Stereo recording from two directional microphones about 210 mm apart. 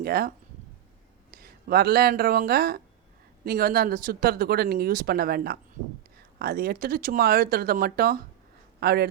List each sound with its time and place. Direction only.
0.0 s speech: 45° right (ahead or behind)